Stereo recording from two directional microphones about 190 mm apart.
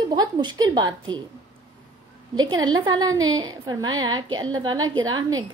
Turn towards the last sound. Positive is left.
turn(degrees=-20)  # may be behind; listen again after turning